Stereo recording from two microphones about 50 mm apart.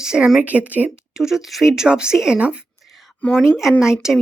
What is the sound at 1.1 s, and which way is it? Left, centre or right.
Speech, centre.